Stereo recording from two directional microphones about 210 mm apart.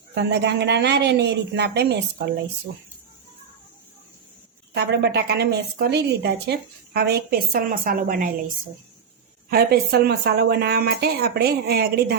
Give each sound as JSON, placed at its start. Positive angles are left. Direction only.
{"t": 0.1, "sound": "a woman's voice", "side_deg": -55}
{"t": 4.7, "sound": "a woman's voice", "side_deg": -50}